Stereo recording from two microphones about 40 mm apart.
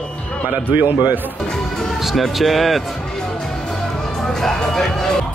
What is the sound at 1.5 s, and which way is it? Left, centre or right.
Speech, centre.